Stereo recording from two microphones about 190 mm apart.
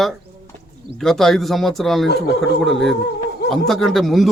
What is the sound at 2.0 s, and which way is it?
Speech, 60° left (ahead or behind).